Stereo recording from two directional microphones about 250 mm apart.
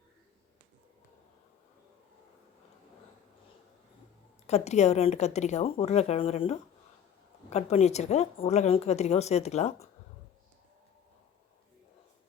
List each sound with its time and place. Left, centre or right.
4.4 s a woman's voice: left